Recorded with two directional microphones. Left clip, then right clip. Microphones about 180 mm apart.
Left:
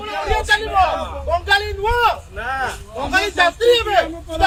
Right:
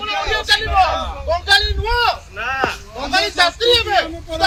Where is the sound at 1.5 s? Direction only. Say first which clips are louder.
Right 3 dB; 25° left (ahead or behind).